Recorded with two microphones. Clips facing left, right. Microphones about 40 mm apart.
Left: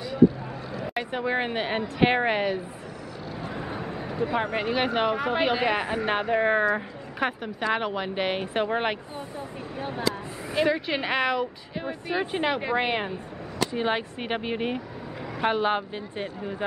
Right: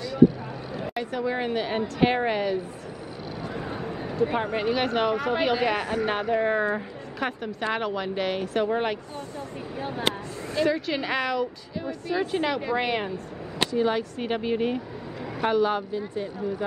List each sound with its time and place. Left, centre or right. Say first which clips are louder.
0.9 s speech: left 1 dB; left
3.5 s a sound: right 1 dB; centre
4.4 s speech: even; centre
9.8 s speech: even; centre
10.5 s speech: even; left
15.4 s speech: right 1 dB; left